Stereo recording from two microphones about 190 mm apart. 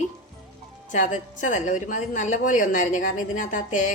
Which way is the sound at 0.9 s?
40° left (ahead or behind).